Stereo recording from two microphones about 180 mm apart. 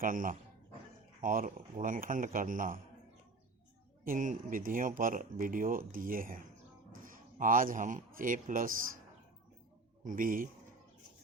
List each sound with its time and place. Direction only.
0.0 s speech: 50° right (ahead or behind)
4.0 s speech: 45° right (ahead or behind)
10.0 s speech: 45° right (ahead or behind)